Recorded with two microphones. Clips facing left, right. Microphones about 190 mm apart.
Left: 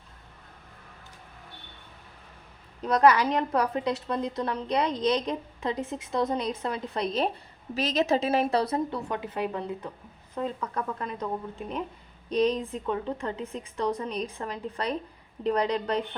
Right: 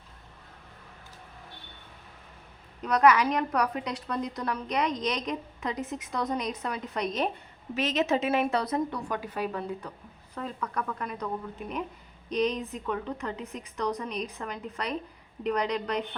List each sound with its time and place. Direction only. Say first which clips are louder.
2.8 s a woman's voice: left 1 dB; 30° left (ahead or behind)